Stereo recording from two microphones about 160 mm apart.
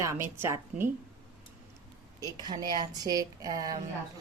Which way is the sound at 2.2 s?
25° right (ahead or behind).